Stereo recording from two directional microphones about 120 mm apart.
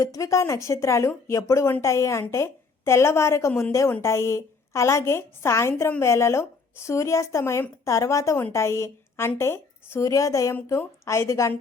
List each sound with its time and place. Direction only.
0.0 s a woman's voice: 25° left (ahead or behind)